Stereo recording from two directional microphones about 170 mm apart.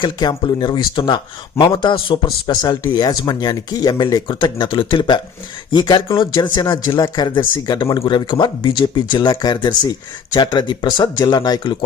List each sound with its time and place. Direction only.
0.0 s speech: 25° left (ahead or behind)